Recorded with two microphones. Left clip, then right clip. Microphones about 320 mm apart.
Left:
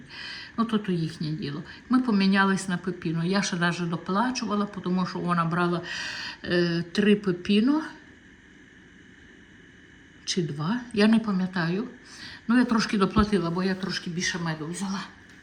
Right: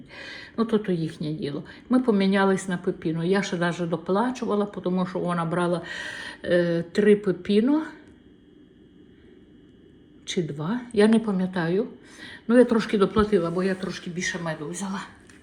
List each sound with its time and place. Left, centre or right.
0.9 s speech: left
1.9 s speech: centre
10.3 s speech: centre